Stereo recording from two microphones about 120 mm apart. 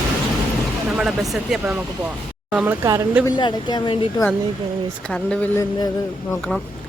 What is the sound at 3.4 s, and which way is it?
Speech, 40° left (ahead or behind).